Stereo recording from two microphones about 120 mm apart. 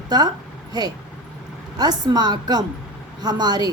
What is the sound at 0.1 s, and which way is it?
A woman's voice, 35° right (ahead or behind).